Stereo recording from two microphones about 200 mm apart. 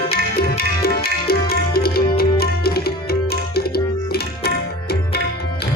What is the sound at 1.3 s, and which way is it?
Music, 50° left (ahead or behind).